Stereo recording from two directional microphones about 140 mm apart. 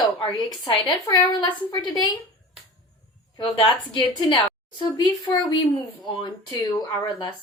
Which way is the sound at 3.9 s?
35° left (ahead or behind).